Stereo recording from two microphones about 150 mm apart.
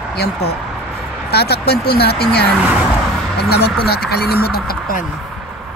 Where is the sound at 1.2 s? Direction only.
90° left.